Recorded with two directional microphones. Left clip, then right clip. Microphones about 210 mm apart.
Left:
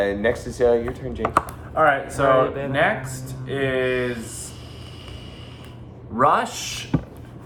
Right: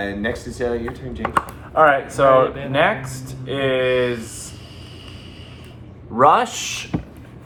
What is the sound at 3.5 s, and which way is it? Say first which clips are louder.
Speech: right 4 dB; 10° right (ahead or behind).